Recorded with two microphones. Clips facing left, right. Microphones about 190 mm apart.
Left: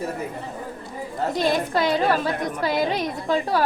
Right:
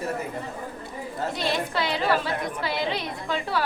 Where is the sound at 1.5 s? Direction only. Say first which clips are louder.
Left 4 dB; 45° left (ahead or behind).